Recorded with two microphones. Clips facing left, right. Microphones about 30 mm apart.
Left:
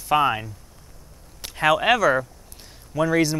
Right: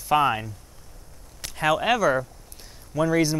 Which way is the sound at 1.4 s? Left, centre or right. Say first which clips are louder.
Left 3 dB; centre.